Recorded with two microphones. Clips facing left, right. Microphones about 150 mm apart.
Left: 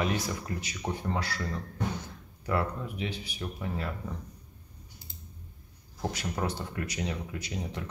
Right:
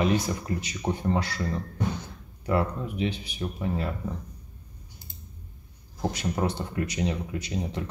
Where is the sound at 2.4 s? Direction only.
20° right (ahead or behind).